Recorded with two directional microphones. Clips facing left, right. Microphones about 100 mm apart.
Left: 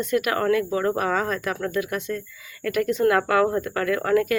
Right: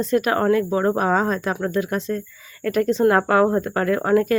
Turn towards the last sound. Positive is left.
turn(degrees=-30)  # may be behind; listen again after turning